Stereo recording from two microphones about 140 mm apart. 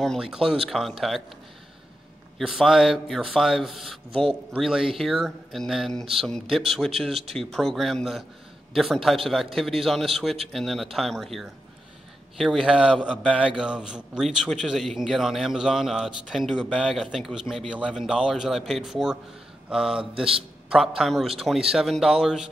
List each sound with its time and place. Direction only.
0.0 s a man's voice: centre (ahead or behind)
2.3 s a man's voice: 5° right (ahead or behind)